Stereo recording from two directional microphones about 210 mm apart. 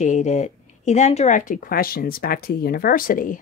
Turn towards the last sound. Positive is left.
turn(degrees=40)  # may be behind; listen again after turning